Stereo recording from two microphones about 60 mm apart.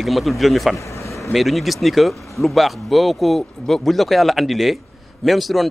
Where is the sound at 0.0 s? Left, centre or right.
Centre.